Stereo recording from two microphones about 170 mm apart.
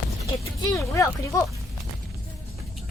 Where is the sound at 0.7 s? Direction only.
20° left (ahead or behind).